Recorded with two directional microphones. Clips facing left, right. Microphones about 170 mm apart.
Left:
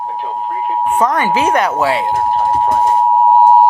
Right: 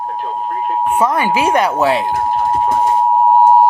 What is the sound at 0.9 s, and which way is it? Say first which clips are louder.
Speech: left 1 dB; 10° right (ahead or behind).